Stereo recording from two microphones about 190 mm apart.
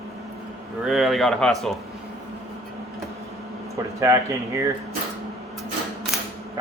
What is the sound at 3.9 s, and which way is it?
Speech, 15° right (ahead or behind).